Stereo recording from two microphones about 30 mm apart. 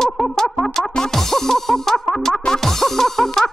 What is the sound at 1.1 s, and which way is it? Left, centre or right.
Music, centre.